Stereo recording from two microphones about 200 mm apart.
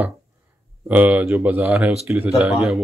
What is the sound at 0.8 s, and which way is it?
A man's voice, 10° right (ahead or behind).